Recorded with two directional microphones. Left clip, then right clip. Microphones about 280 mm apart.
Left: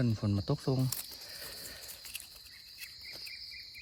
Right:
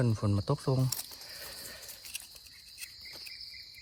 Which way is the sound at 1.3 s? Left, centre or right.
Right.